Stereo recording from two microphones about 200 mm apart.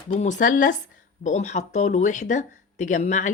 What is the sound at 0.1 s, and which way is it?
Speech, 35° left (ahead or behind).